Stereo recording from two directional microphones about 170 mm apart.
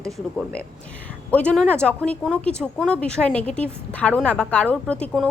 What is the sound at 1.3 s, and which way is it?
A woman's voice, 5° left (ahead or behind).